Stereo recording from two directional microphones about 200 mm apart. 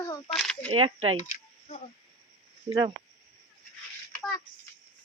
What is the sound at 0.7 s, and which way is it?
Speech, 30° right (ahead or behind).